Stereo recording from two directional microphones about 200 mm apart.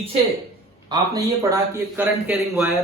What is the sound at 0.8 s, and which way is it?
Speech, 20° right (ahead or behind).